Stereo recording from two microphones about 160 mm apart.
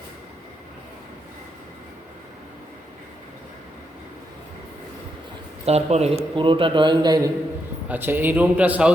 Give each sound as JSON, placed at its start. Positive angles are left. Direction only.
{"t": 5.6, "sound": "a man's voice", "side_deg": -40}
{"t": 7.9, "sound": "a man's voice", "side_deg": -10}